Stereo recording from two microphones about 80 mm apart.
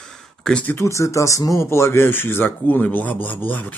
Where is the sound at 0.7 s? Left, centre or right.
Left.